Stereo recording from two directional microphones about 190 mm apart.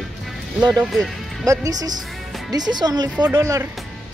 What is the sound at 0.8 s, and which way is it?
Speech, centre (ahead or behind).